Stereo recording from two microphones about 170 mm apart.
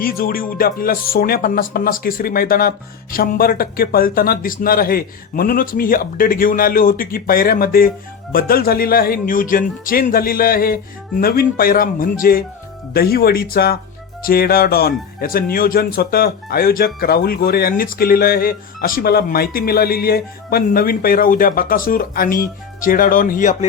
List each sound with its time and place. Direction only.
0.0 s speech: 60° left (ahead or behind)